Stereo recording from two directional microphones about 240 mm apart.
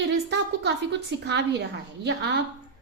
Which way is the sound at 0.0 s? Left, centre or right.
Right.